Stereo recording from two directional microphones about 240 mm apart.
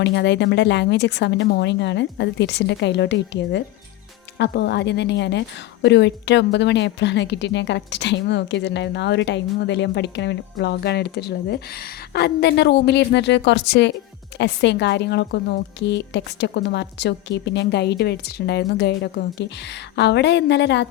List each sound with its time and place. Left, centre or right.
0.0 s a woman's voice: left